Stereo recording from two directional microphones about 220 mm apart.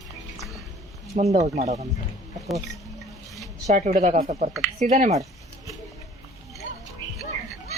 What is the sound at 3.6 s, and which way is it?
Speech, 35° right (ahead or behind).